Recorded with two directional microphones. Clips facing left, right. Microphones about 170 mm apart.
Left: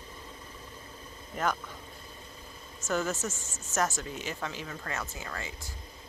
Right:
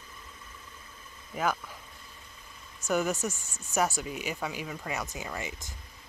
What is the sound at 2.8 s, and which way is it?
Speech, 15° right (ahead or behind).